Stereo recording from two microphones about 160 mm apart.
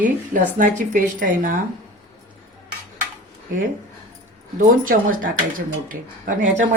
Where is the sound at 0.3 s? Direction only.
55° right (ahead or behind).